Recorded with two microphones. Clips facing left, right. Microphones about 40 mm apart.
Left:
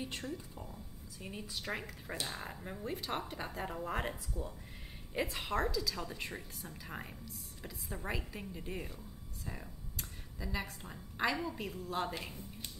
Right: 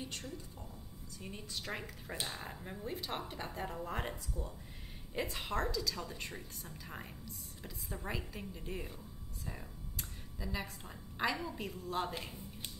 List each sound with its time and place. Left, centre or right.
0.1 s speech: left
0.6 s a woman's voice: centre